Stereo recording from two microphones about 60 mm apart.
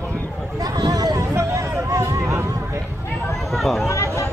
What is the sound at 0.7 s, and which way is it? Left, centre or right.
Hubbub, right.